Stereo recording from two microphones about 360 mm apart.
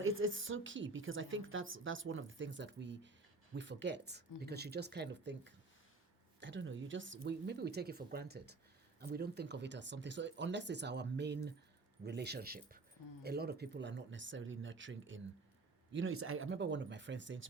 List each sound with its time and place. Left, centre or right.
0.0 s speech: right
6.4 s speech: right